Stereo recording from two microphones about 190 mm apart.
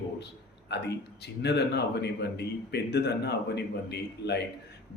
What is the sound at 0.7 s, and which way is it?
A man's voice, 60° left (ahead or behind).